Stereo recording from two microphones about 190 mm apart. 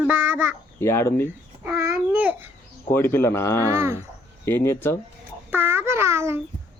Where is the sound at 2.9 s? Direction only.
10° left (ahead or behind).